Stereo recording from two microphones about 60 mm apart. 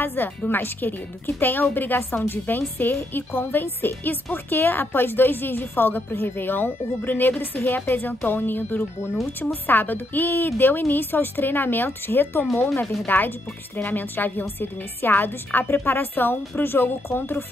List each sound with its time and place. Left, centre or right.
0.0 s speech: left